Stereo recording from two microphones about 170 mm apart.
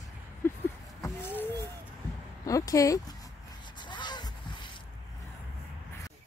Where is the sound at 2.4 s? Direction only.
20° left (ahead or behind).